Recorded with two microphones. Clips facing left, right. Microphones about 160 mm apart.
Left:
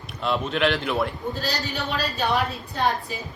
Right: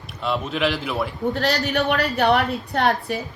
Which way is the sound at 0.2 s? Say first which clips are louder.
Even; centre (ahead or behind).